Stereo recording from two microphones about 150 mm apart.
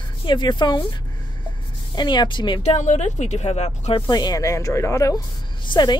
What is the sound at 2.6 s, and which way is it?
Speech, 50° left (ahead or behind).